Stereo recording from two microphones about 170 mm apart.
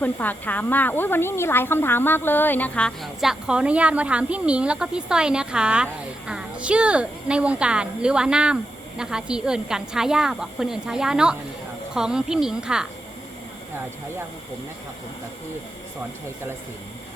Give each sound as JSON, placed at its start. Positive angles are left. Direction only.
{"t": 0.0, "sound": "speech", "side_deg": 10}